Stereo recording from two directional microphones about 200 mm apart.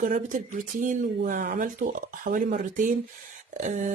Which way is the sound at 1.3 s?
45° right (ahead or behind).